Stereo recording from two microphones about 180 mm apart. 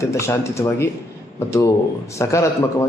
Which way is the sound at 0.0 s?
15° left (ahead or behind).